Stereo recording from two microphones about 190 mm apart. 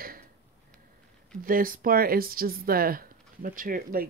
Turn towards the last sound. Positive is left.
turn(degrees=-50)  # may be behind; listen again after turning